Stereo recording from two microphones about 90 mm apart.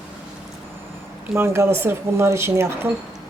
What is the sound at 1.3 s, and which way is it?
A woman's voice, 30° right (ahead or behind).